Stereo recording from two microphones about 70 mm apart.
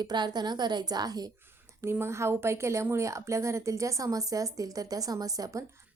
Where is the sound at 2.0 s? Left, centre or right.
Right.